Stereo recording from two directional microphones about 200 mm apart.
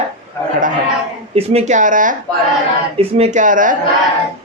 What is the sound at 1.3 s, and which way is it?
Speech, 30° right (ahead or behind).